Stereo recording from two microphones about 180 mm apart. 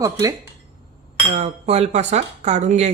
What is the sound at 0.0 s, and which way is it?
Speech, 20° right (ahead or behind).